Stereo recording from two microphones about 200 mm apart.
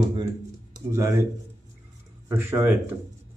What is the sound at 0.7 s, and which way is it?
Speech, 15° right (ahead or behind).